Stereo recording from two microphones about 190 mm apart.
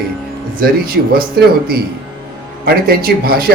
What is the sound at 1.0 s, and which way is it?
Speech, 55° right (ahead or behind).